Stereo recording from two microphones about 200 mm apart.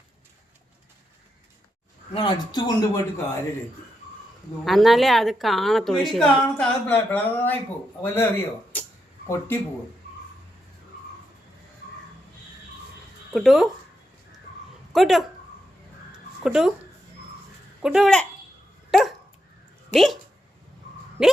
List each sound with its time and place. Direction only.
2.1 s speech: 20° left (ahead or behind)
4.6 s a woman's voice: centre (ahead or behind)
13.3 s a woman's voice: centre (ahead or behind)
14.9 s speech: centre (ahead or behind)
16.4 s a woman's voice: 5° right (ahead or behind)
17.8 s a woman's voice: centre (ahead or behind)
18.9 s dog: centre (ahead or behind)
19.9 s speech: centre (ahead or behind)
21.2 s speech: 5° right (ahead or behind)